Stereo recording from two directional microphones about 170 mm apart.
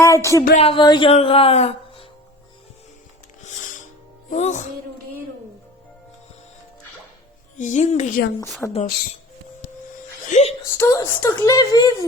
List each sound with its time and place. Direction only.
0.0 s speech: 15° left (ahead or behind)
0.5 s speech: 35° left (ahead or behind)
4.3 s a woman's voice: 45° left (ahead or behind)
7.6 s a woman's voice: 45° left (ahead or behind)
8.6 s speech: 5° left (ahead or behind)
10.2 s speech: 45° left (ahead or behind)
10.8 s a woman's voice: 15° left (ahead or behind)